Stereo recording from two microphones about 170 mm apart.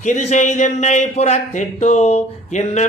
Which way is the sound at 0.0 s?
45° left (ahead or behind).